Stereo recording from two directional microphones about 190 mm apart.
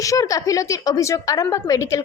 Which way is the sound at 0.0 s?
15° left (ahead or behind).